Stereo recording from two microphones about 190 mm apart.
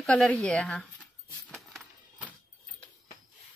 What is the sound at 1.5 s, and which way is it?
Coin, centre (ahead or behind).